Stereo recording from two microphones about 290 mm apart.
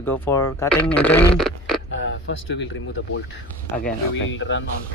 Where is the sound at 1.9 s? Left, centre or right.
Left.